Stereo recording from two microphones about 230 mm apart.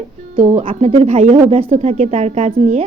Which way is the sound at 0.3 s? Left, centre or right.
Right.